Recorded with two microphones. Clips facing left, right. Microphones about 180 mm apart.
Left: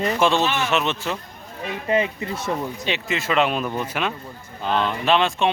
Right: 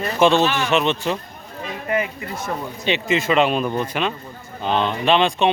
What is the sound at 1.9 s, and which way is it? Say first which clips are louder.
Speech: left 2 dB; 25° left (ahead or behind).